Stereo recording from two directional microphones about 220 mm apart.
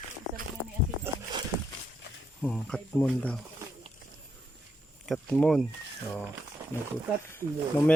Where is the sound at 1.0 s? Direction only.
20° right (ahead or behind).